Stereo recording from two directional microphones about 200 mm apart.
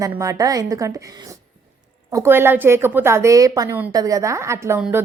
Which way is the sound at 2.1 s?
10° right (ahead or behind).